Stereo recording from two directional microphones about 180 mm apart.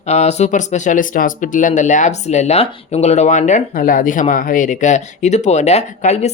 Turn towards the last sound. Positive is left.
turn(degrees=35)  # may be behind; listen again after turning